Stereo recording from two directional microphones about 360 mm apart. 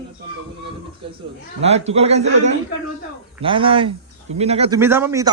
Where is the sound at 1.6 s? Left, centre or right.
Centre.